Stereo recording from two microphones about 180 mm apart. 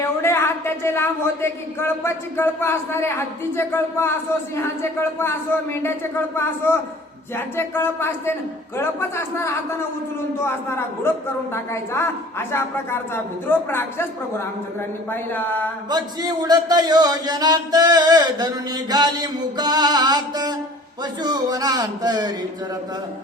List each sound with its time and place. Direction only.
0.2 s speech: 15° left (ahead or behind)
15.1 s speech: 10° left (ahead or behind)
15.9 s speech: 25° right (ahead or behind)